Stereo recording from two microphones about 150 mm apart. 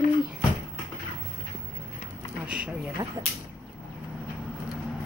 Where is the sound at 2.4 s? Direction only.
5° right (ahead or behind).